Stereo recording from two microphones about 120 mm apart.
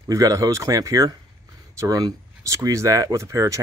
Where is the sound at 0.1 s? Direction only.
25° right (ahead or behind).